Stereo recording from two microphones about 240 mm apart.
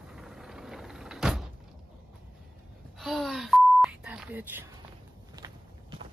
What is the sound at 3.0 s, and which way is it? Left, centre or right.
Beep, centre.